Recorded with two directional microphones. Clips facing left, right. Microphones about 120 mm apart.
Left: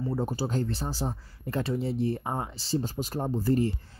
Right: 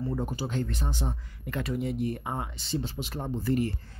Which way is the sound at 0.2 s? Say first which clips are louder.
Left 2 dB; 35° left (ahead or behind).